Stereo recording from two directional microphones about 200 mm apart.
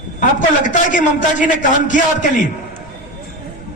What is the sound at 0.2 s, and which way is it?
A man's voice, 40° left (ahead or behind).